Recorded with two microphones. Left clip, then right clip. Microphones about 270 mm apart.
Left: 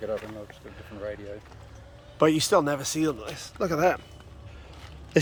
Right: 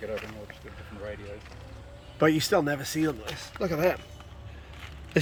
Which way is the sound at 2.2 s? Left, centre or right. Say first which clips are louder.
Left 2 dB; centre.